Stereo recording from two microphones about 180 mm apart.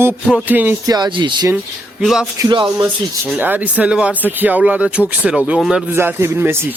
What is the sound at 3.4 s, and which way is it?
Speech, 10° right (ahead or behind).